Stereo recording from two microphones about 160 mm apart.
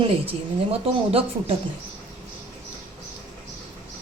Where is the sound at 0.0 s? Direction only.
35° right (ahead or behind).